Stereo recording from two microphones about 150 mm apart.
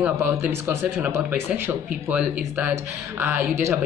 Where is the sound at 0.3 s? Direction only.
15° right (ahead or behind).